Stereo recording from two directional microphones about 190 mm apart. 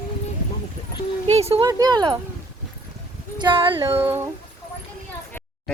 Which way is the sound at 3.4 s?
25° right (ahead or behind).